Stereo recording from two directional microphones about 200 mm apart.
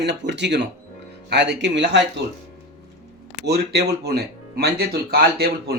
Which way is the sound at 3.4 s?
50° right (ahead or behind).